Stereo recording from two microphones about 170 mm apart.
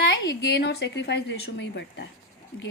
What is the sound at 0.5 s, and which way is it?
A woman's voice, 75° left (ahead or behind).